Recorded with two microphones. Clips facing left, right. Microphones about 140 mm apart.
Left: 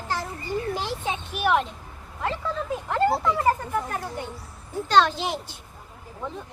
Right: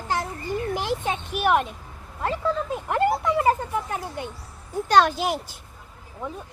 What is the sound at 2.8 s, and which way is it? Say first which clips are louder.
A child's voice: even; 15° right (ahead or behind).